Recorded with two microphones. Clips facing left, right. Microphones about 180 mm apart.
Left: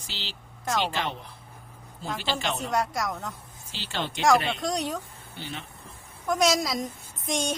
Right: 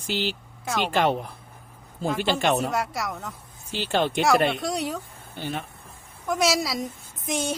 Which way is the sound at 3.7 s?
55° right (ahead or behind).